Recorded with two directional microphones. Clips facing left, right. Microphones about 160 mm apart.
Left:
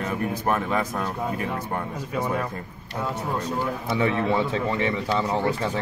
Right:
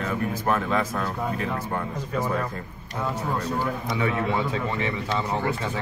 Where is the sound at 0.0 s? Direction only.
15° left (ahead or behind).